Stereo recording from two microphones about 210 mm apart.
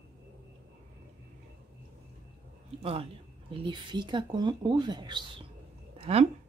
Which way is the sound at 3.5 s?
20° right (ahead or behind).